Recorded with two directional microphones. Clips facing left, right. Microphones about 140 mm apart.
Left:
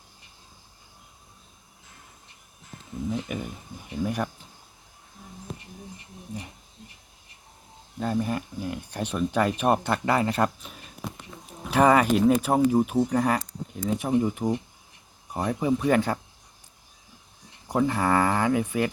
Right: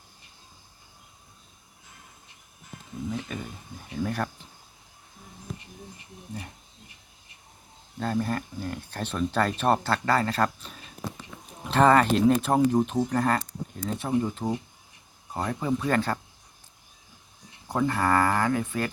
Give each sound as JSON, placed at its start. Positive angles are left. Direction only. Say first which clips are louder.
{"t": 3.3, "sound": "speech", "louder": "left 3 dB", "side_deg": 15}
{"t": 7.9, "sound": "speech", "louder": "left 1 dB", "side_deg": 10}
{"t": 11.7, "sound": "speech", "louder": "even", "side_deg": 10}
{"t": 17.7, "sound": "speech", "louder": "left 1 dB", "side_deg": 10}